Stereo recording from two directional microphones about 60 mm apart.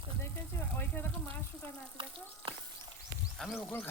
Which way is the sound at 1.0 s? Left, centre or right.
Left.